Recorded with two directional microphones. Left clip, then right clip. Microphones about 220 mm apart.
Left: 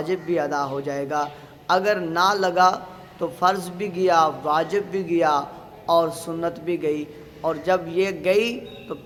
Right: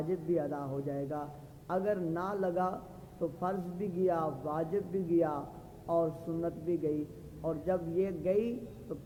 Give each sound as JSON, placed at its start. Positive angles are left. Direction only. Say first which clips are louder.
{"t": 0.1, "sound": "a man's voice", "louder": "left 11 dB", "side_deg": 20}